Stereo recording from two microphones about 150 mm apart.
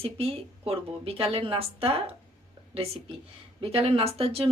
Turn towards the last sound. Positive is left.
turn(degrees=-40)  # may be behind; listen again after turning